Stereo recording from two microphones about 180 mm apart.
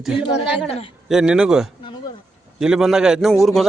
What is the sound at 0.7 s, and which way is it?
Speech, 35° left (ahead or behind).